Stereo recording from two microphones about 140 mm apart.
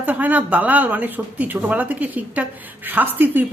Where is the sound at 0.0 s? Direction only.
10° right (ahead or behind).